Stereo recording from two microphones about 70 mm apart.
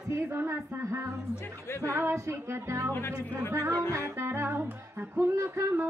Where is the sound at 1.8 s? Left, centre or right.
Right.